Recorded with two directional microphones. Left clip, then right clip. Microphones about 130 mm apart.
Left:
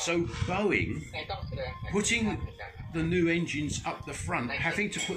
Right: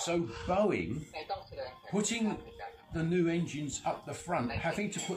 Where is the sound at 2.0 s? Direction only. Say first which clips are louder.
Left 5 dB; 25° right (ahead or behind).